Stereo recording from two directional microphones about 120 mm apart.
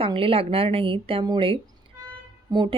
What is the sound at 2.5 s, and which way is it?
Speech, 40° right (ahead or behind).